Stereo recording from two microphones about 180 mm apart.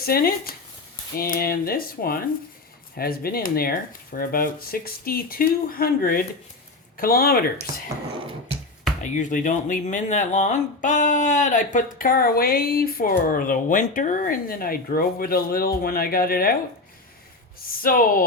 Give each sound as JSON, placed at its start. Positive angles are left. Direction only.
{"t": 0.0, "sound": "speech", "side_deg": 55}
{"t": 9.0, "sound": "speech", "side_deg": 45}
{"t": 17.7, "sound": "speech", "side_deg": 50}